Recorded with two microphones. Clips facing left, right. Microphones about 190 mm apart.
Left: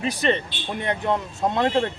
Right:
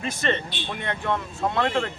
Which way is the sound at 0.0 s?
15° left (ahead or behind).